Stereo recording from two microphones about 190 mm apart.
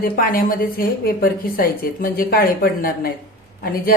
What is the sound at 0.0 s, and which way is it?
A woman's voice, 50° left (ahead or behind).